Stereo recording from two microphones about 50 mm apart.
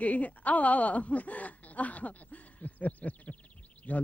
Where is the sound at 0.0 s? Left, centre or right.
Left.